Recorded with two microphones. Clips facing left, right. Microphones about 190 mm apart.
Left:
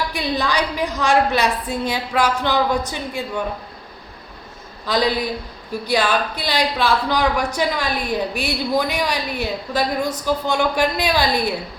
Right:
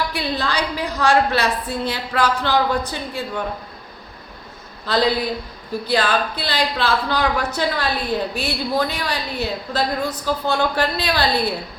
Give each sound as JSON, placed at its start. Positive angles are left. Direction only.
{"t": 0.1, "sound": "speech", "side_deg": 15}
{"t": 4.9, "sound": "speech", "side_deg": 15}